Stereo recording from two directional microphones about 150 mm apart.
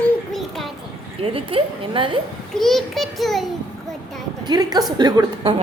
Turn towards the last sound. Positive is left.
turn(degrees=-30)  # may be behind; listen again after turning